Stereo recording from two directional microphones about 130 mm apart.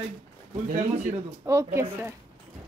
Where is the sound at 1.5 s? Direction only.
20° right (ahead or behind).